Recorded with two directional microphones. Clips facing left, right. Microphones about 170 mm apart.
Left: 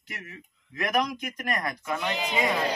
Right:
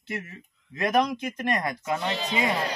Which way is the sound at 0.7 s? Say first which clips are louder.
Right 3 dB; 25° right (ahead or behind).